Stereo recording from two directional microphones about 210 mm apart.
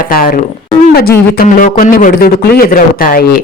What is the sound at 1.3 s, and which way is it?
Speech, 40° left (ahead or behind).